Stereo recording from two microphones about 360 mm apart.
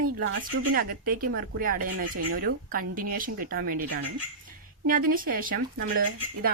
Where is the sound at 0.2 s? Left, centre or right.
Right.